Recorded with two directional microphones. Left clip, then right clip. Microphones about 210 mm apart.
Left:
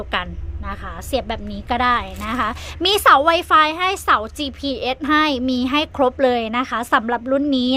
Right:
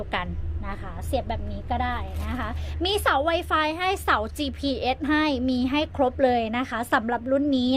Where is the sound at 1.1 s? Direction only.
25° left (ahead or behind).